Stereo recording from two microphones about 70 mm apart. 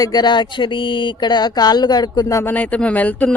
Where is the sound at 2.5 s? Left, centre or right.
Left.